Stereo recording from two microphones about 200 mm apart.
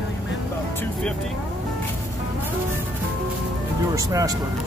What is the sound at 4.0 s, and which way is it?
Speech, 15° right (ahead or behind).